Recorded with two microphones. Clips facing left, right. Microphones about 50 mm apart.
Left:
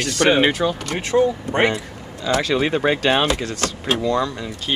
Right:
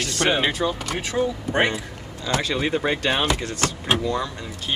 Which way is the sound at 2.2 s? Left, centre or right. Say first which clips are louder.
Left 4 dB; left.